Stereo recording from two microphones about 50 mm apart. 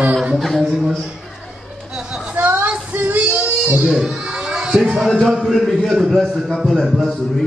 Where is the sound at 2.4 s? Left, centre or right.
Right.